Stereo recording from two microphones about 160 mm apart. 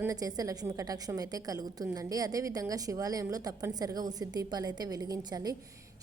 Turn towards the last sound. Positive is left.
turn(degrees=-25)  # may be behind; listen again after turning